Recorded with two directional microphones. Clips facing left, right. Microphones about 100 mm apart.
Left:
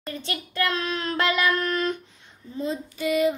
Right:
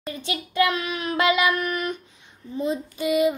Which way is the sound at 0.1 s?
15° right (ahead or behind).